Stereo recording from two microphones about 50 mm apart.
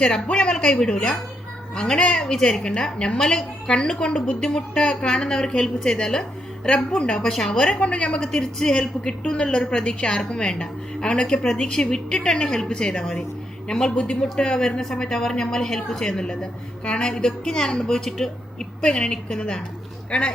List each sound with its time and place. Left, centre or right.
0.0 s a woman's voice: centre
2.2 s a woman's voice: centre
8.2 s a woman's voice: centre